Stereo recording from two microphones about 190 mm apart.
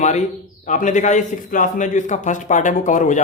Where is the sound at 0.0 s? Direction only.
40° left (ahead or behind).